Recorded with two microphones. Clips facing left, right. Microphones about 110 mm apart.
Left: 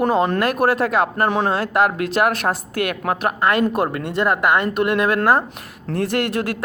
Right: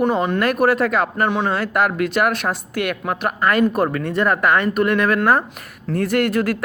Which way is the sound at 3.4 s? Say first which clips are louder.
Right 3 dB; 25° left (ahead or behind).